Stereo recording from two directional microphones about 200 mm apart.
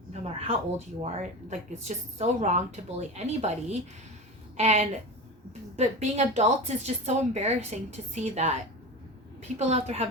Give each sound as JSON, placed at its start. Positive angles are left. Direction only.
{"t": 0.1, "sound": "a sound", "side_deg": -30}
{"t": 1.0, "sound": "a woman's voice", "side_deg": -35}
{"t": 9.6, "sound": "a woman's voice", "side_deg": -35}